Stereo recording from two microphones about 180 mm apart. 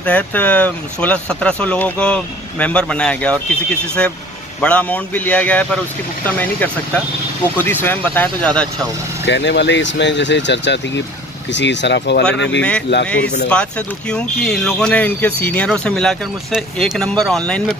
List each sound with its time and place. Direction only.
0.0 s speech: 10° left (ahead or behind)
9.2 s speech: 75° left (ahead or behind)
13.5 s speech: 5° left (ahead or behind)